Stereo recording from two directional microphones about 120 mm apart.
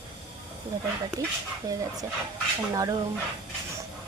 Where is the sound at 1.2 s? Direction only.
25° right (ahead or behind).